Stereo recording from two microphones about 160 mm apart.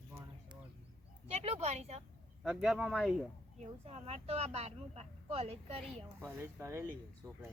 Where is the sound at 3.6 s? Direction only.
45° right (ahead or behind).